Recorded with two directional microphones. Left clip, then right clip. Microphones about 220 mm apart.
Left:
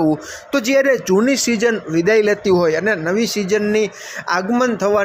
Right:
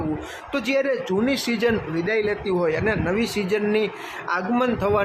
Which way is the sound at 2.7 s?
15° left (ahead or behind).